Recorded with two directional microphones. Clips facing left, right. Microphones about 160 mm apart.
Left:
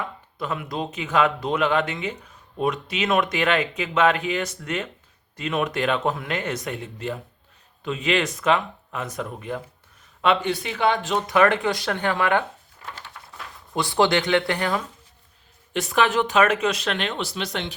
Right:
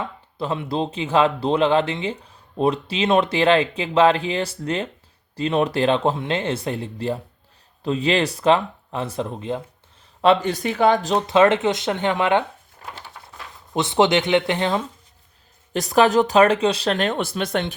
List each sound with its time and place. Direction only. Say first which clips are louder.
0.0 s speech: right 3 dB; 30° right (ahead or behind)
10.2 s speech: right 4 dB; 40° right (ahead or behind); by 12.5 s 20° right (ahead or behind)
13.7 s speech: right 3 dB; 20° right (ahead or behind)
15.7 s speech: right 5 dB; 35° right (ahead or behind)